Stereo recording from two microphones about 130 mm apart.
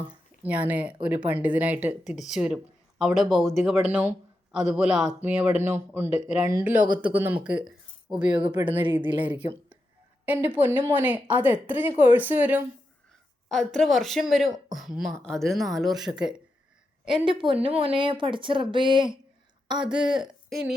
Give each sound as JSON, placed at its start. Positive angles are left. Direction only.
{"t": 0.4, "sound": "speech", "side_deg": -10}
{"t": 8.3, "sound": "speech", "side_deg": -35}
{"t": 8.6, "sound": "speech", "side_deg": -15}
{"t": 8.9, "sound": "speech", "side_deg": -40}
{"t": 10.2, "sound": "speech", "side_deg": -15}
{"t": 13.5, "sound": "speech", "side_deg": 0}
{"t": 17.2, "sound": "speech", "side_deg": -40}
{"t": 19.8, "sound": "speech", "side_deg": -5}